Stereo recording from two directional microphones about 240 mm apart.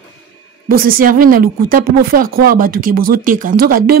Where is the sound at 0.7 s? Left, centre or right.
Right.